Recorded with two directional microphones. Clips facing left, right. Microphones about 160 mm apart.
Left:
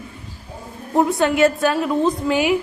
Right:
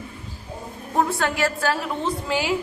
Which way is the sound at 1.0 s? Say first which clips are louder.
Left 6 dB; 20° left (ahead or behind).